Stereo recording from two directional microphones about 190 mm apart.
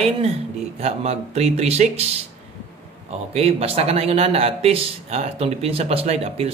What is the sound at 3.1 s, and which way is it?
Speech, 35° right (ahead or behind).